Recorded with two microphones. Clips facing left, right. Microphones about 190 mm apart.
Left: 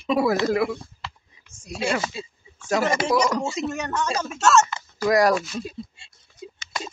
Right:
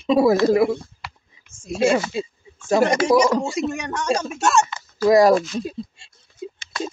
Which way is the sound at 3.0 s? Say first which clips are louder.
Right 5 dB; 25° right (ahead or behind).